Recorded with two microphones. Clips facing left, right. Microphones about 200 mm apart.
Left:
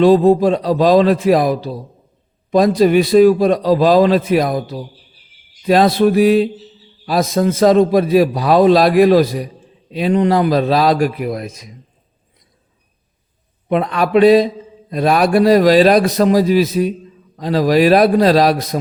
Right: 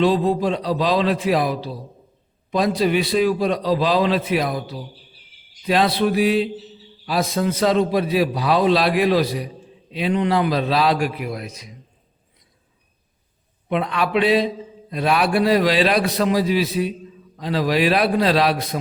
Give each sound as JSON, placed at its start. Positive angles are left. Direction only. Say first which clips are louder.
{"t": 0.0, "sound": "a man's voice", "louder": "left 8 dB", "side_deg": 45}
{"t": 13.7, "sound": "a man's voice", "louder": "left 5 dB", "side_deg": 45}